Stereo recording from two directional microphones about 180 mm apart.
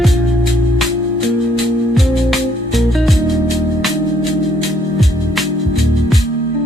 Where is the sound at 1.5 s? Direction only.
Centre (ahead or behind).